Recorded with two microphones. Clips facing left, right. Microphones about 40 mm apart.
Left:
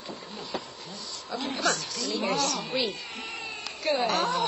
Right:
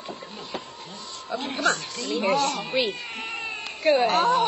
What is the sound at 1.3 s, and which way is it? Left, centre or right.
A woman's voice, right.